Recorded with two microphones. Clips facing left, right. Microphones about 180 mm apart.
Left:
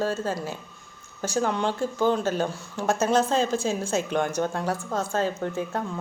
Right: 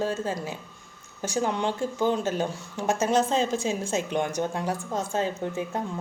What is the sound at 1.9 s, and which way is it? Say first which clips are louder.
Speech: left 2 dB; 15° right (ahead or behind).